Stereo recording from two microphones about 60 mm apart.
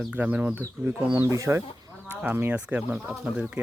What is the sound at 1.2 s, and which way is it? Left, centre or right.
Speech, right.